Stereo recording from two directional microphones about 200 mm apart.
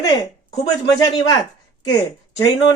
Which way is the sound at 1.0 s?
20° left (ahead or behind).